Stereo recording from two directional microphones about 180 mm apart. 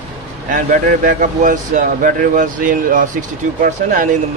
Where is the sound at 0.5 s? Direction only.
45° right (ahead or behind).